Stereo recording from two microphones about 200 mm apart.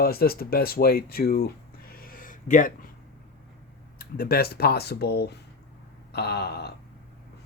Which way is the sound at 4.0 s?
50° left (ahead or behind).